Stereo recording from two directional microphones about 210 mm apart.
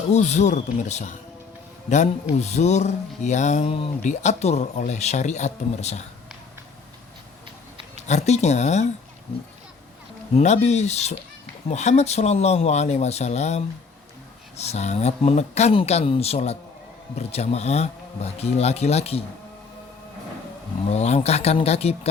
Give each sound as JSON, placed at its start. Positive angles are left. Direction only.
{"t": 0.1, "sound": "speech", "side_deg": 35}
{"t": 2.4, "sound": "speech", "side_deg": 30}
{"t": 8.0, "sound": "speech", "side_deg": 35}
{"t": 10.3, "sound": "speech", "side_deg": 30}
{"t": 20.8, "sound": "speech", "side_deg": 30}